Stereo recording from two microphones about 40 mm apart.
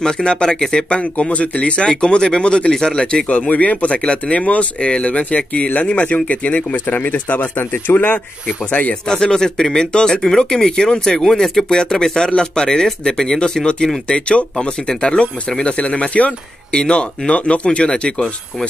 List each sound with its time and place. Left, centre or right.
0.0 s speech: left
1.3 s speech: left
3.3 s speech: left
9.0 s speech: centre